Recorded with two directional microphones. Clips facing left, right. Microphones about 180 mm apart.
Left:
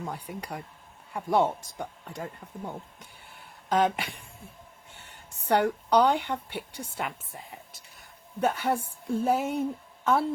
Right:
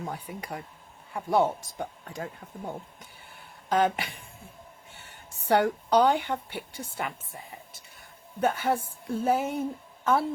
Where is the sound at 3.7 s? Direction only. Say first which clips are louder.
Even; centre (ahead or behind).